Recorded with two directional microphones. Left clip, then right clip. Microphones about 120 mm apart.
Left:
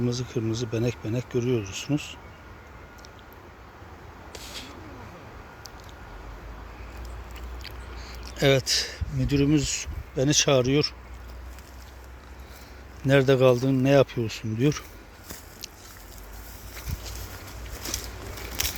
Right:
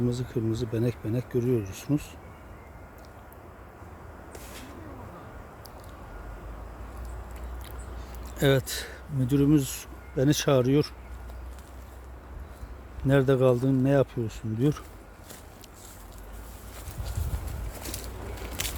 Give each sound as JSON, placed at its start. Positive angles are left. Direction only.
{"t": 0.1, "sound": "speech", "side_deg": -5}
{"t": 4.3, "sound": "a sound", "side_deg": -15}
{"t": 8.4, "sound": "speech", "side_deg": -20}
{"t": 13.1, "sound": "speech", "side_deg": -10}